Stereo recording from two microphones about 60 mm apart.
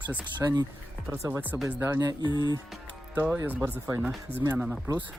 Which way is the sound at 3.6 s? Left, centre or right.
Right.